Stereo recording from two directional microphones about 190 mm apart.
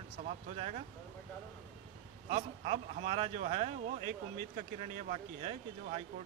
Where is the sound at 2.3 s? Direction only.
35° right (ahead or behind).